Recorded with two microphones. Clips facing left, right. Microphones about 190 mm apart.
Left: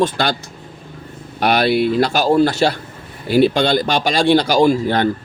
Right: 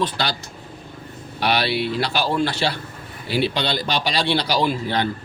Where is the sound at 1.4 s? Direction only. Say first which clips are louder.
Left 6 dB; 50° left (ahead or behind).